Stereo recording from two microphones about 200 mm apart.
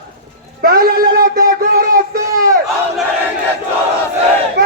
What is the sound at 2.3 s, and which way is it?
Battle cry, 15° right (ahead or behind).